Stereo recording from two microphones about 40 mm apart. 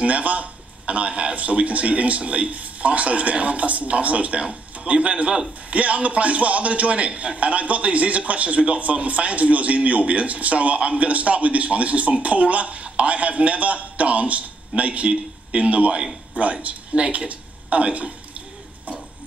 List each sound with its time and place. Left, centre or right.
0.0 s a man's voice: right